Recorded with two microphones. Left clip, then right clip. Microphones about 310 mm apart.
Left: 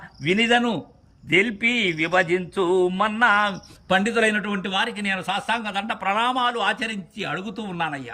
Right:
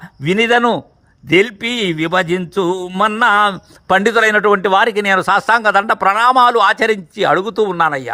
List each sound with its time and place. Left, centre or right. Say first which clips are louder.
0.2 s speech: right 7 dB; centre